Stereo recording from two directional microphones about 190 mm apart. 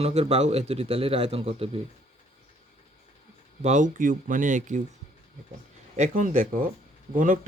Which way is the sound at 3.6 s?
40° right (ahead or behind).